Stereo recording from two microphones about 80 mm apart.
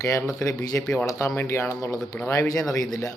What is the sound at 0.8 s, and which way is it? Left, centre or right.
Speech, centre.